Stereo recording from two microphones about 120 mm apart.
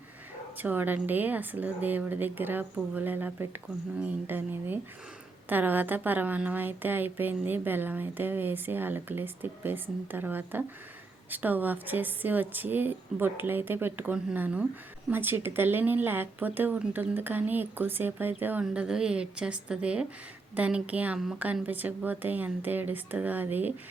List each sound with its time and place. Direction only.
0.6 s a woman's voice: 15° right (ahead or behind)